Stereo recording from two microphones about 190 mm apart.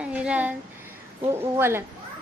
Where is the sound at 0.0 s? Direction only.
5° right (ahead or behind).